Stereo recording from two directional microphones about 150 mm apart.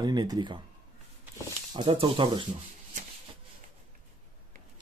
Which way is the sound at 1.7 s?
35° right (ahead or behind).